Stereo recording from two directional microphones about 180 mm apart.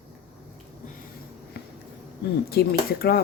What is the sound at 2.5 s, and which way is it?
Speech, 60° left (ahead or behind).